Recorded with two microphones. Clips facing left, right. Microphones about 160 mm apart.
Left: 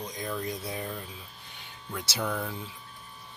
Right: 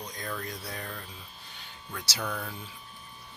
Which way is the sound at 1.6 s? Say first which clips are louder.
Left 4 dB; 20° left (ahead or behind).